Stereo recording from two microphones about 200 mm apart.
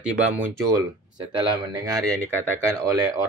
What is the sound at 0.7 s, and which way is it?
Speech, 20° right (ahead or behind).